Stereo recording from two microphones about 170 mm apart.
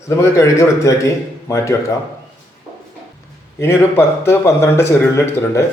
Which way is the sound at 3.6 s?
15° left (ahead or behind).